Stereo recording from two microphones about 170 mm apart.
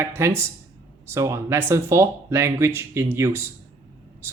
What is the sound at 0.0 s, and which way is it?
Speech, 15° right (ahead or behind).